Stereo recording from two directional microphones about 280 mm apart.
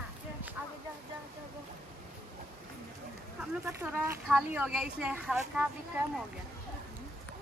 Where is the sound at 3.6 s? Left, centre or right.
Centre.